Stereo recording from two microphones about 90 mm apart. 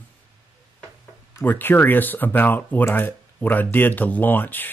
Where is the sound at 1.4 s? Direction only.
20° left (ahead or behind).